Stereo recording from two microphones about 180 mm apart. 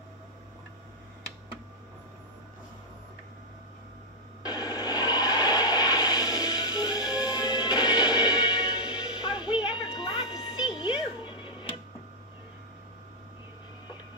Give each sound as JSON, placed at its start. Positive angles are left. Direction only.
{"t": 4.4, "sound": "a sound", "side_deg": 20}
{"t": 9.7, "sound": "music", "side_deg": 25}
{"t": 10.8, "sound": "cat", "side_deg": 25}